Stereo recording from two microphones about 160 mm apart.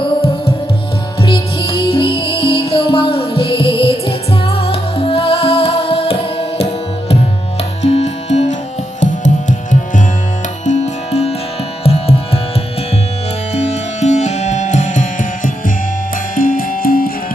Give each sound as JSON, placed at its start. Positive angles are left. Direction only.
{"t": 1.2, "sound": "music", "side_deg": 35}
{"t": 7.8, "sound": "music", "side_deg": 40}
{"t": 10.7, "sound": "music", "side_deg": 45}
{"t": 13.5, "sound": "music", "side_deg": 45}